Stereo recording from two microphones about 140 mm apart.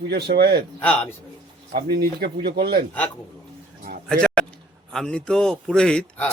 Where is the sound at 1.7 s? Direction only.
90° right.